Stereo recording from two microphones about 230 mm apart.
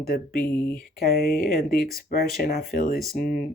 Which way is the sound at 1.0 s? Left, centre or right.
Left.